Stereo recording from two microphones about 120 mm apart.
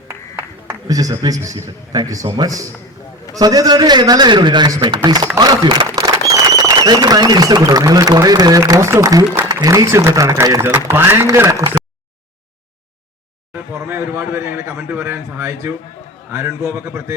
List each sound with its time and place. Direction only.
0.3 s a sound: 30° right (ahead or behind)
1.6 s a man's voice: 30° right (ahead or behind)
6.0 s a man's voice: 30° right (ahead or behind)
13.5 s a man's voice: 20° right (ahead or behind)